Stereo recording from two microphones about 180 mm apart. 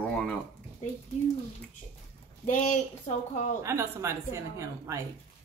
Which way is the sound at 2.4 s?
45° left (ahead or behind).